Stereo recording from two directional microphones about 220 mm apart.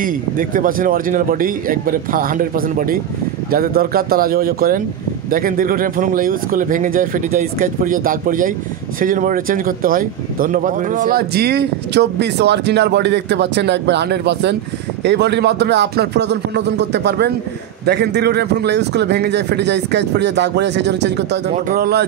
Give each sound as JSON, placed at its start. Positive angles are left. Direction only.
{"t": 0.0, "sound": "speech", "side_deg": -40}